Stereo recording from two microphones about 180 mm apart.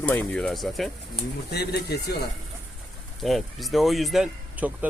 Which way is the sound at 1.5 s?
65° left (ahead or behind).